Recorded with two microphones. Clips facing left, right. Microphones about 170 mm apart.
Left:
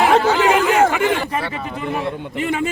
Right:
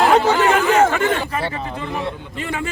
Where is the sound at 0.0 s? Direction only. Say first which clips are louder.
Even; 10° left (ahead or behind).